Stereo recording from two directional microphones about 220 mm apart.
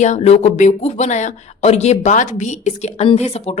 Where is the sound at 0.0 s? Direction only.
30° left (ahead or behind).